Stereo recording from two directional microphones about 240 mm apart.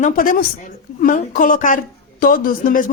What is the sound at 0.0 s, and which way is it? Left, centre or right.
A woman's voice, left.